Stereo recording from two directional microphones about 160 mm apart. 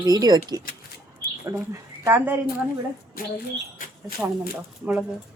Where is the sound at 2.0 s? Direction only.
15° right (ahead or behind).